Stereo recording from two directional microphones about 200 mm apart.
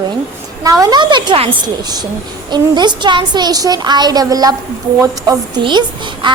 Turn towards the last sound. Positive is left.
turn(degrees=-25)  # may be behind; listen again after turning